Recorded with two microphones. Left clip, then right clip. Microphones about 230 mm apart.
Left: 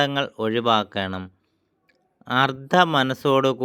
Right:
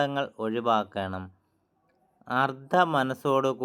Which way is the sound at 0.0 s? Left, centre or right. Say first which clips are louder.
Left 5 dB; left.